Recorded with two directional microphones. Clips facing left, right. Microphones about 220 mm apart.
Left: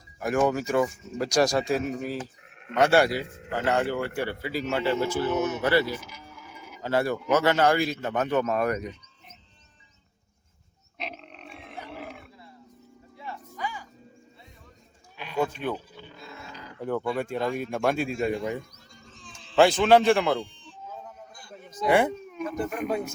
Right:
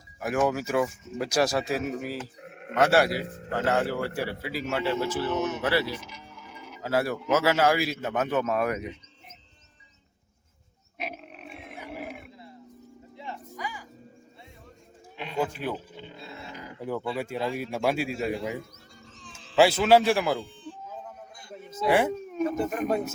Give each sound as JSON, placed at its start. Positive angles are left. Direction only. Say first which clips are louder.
{"t": 0.2, "sound": "speech", "louder": "left 2 dB", "side_deg": -5}
{"t": 5.3, "sound": "speech", "louder": "left 3 dB", "side_deg": 5}
{"t": 10.9, "sound": "pig", "louder": "right 1 dB", "side_deg": -10}
{"t": 11.6, "sound": "roaring cats", "louder": "right 1 dB", "side_deg": -15}
{"t": 13.1, "sound": "music", "louder": "even", "side_deg": -20}
{"t": 16.0, "sound": "dog", "louder": "right 2 dB", "side_deg": -25}
{"t": 16.8, "sound": "speech", "louder": "left 3 dB", "side_deg": -5}
{"t": 21.5, "sound": "a sound", "louder": "left 1 dB", "side_deg": 0}
{"t": 22.3, "sound": "speech", "louder": "right 3 dB", "side_deg": -40}